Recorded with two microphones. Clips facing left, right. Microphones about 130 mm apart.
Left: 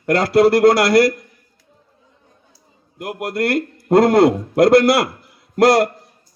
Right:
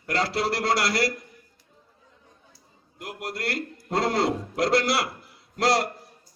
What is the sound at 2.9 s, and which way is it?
A man's voice, 55° left (ahead or behind).